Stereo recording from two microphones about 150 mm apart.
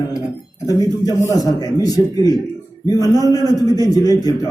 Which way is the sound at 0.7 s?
25° left (ahead or behind).